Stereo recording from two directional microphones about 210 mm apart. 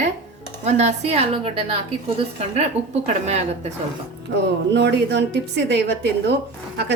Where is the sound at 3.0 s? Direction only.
30° right (ahead or behind).